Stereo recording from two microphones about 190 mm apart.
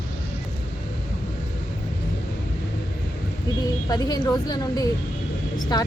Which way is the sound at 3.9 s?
20° left (ahead or behind).